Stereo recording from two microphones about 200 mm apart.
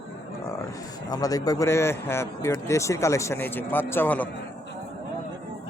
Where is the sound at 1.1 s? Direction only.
20° left (ahead or behind).